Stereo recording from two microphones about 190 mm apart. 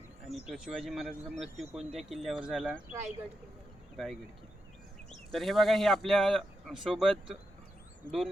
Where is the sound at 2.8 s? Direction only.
35° right (ahead or behind).